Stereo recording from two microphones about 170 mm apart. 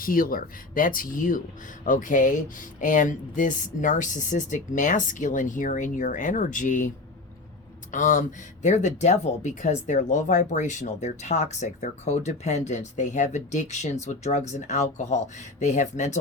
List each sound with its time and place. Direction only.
0.0 s speech: 55° left (ahead or behind)